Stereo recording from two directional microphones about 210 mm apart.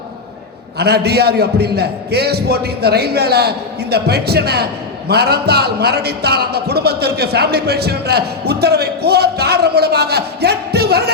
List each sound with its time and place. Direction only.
0.8 s a man's voice: 50° right (ahead or behind)